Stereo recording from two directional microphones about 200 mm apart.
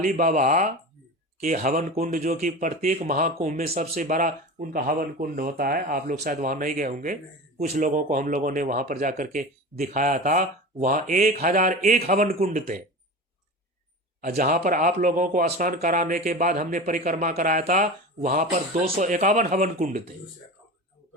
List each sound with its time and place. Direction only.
0.0 s speech: 40° right (ahead or behind)
14.3 s speech: 45° right (ahead or behind)